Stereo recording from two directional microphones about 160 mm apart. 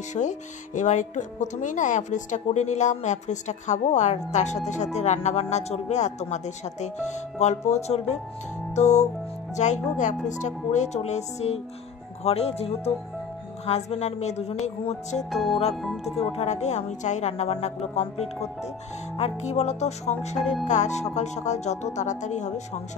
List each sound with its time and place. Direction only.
0.1 s speech: 50° left (ahead or behind)
8.7 s music: 45° left (ahead or behind)
9.6 s a woman's voice: 45° left (ahead or behind)
15.3 s speech: centre (ahead or behind)
16.2 s a woman's voice: 40° left (ahead or behind)